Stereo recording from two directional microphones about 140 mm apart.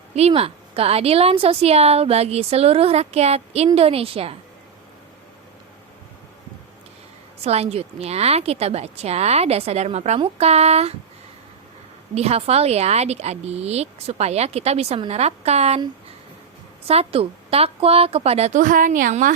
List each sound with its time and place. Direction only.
0.2 s a woman's voice: 45° right (ahead or behind)
7.4 s a woman's voice: 50° right (ahead or behind)
12.1 s a woman's voice: 45° right (ahead or behind)
16.8 s a woman's voice: 45° right (ahead or behind)
18.6 s a woman's voice: 70° right (ahead or behind)